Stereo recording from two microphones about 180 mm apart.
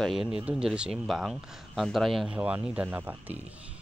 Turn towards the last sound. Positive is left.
turn(degrees=-10)  # may be behind; listen again after turning